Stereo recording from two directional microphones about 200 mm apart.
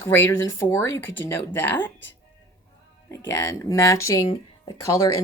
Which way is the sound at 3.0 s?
15° left (ahead or behind).